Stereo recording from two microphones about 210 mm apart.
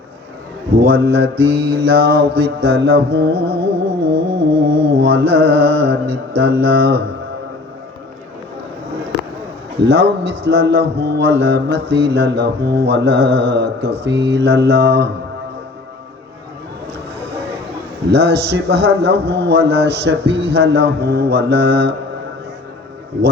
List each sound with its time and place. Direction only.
0.9 s a man's voice: 50° right (ahead or behind)
3.8 s music: 25° right (ahead or behind)
4.9 s a man's voice: 50° right (ahead or behind)
9.8 s a man's voice: 55° right (ahead or behind)
18.1 s a man's voice: 50° right (ahead or behind)